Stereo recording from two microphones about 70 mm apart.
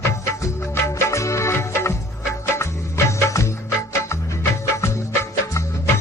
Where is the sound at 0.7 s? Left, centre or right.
Left.